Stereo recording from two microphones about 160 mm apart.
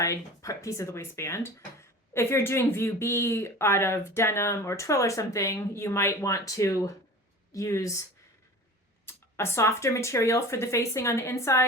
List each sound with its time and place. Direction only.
0.0 s speech: 20° left (ahead or behind)
9.0 s speech: 15° left (ahead or behind)